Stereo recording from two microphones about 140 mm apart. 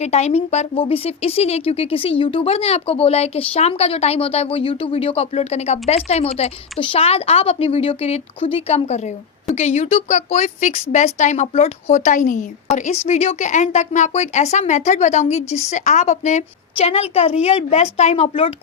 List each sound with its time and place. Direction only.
0.0 s speech: 50° left (ahead or behind); by 12.5 s 70° left (ahead or behind)
12.7 s speech: 55° left (ahead or behind)